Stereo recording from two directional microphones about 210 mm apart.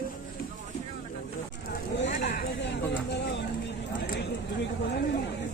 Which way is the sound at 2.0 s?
35° left (ahead or behind).